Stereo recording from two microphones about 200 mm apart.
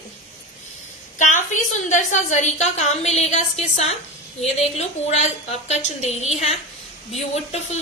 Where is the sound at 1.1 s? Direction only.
40° left (ahead or behind).